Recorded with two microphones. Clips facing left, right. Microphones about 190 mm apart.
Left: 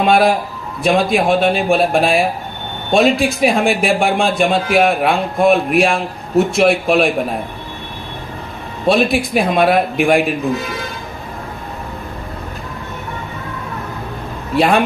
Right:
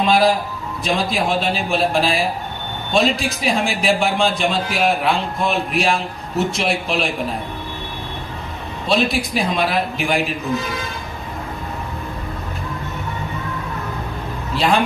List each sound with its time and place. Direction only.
0.0 s a man's voice: 55° left (ahead or behind)
8.9 s speech: 55° left (ahead or behind)
14.5 s a man's voice: 55° left (ahead or behind)